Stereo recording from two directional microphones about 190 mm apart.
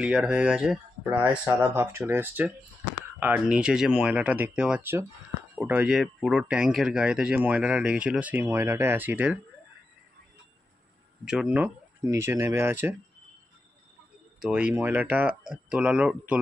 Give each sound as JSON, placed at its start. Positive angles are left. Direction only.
{"t": 0.0, "sound": "speech", "side_deg": -5}
{"t": 11.2, "sound": "speech", "side_deg": -5}
{"t": 14.4, "sound": "speech", "side_deg": -5}